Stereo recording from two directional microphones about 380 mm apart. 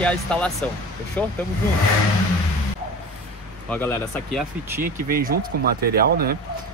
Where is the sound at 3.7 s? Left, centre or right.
Centre.